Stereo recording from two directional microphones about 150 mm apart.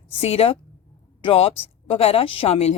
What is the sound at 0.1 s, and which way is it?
Speech, 40° left (ahead or behind).